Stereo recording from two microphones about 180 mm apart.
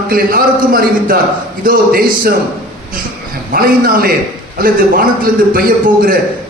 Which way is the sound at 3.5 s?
55° right (ahead or behind).